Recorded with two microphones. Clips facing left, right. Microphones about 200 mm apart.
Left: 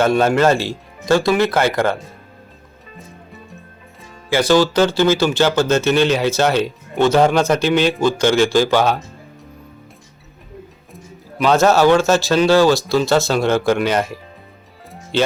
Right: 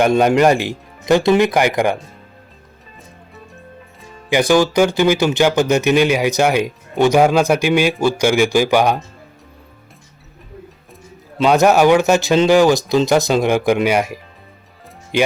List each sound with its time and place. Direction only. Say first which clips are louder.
0.0 s speech: right 2 dB; 15° right (ahead or behind)
4.3 s speech: right 1 dB; 15° right (ahead or behind)
11.4 s speech: right 1 dB; 15° right (ahead or behind)